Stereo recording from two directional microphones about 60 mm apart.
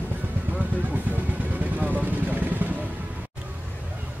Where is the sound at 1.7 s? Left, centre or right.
Right.